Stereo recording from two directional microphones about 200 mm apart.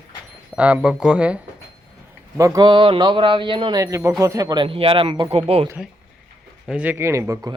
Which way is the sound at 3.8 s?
15° right (ahead or behind).